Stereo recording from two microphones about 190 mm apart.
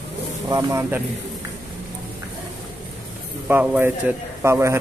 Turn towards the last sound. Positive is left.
turn(degrees=-15)  # may be behind; listen again after turning